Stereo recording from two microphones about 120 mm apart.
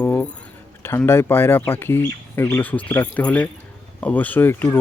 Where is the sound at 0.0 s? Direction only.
15° left (ahead or behind).